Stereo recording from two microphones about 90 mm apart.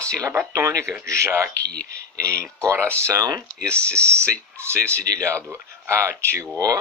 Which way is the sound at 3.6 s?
15° left (ahead or behind).